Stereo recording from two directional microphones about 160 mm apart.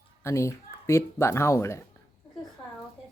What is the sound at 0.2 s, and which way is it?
Speech, 15° left (ahead or behind).